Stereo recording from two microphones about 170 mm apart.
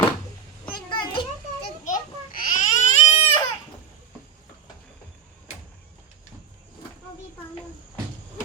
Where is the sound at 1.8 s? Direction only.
50° left (ahead or behind).